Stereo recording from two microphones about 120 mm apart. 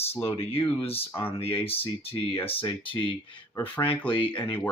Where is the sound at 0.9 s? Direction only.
50° left (ahead or behind).